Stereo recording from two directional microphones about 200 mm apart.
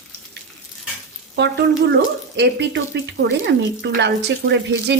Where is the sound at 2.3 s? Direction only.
60° right (ahead or behind).